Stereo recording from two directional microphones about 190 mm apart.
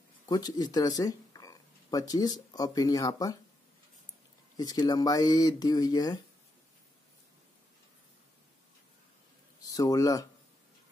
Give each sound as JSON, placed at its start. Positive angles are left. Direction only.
{"t": 0.3, "sound": "speech", "side_deg": 20}
{"t": 4.6, "sound": "speech", "side_deg": 20}
{"t": 9.6, "sound": "speech", "side_deg": 20}